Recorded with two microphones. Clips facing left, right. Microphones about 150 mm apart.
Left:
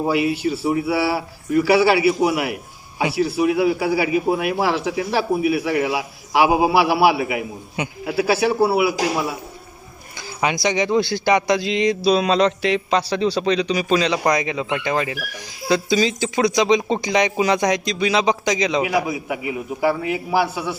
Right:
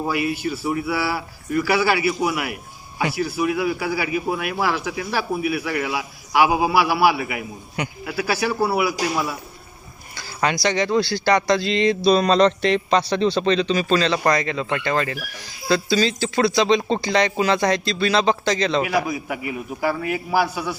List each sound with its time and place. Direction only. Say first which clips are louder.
0.0 s a man's voice: left 4 dB; 25° left (ahead or behind)